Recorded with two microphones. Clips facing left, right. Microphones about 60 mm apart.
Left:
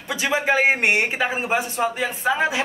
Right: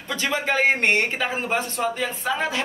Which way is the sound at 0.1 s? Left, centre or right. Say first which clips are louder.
Left 3 dB; centre.